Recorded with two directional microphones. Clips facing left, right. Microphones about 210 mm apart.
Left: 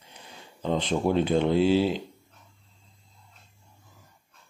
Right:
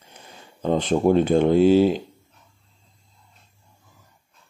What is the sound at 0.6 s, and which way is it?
Speech, 50° right (ahead or behind).